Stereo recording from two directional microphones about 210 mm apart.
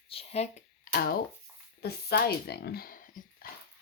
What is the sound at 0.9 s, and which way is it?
Speech, 45° left (ahead or behind).